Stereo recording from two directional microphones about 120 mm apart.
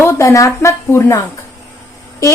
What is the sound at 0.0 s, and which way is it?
A woman's voice, 25° left (ahead or behind).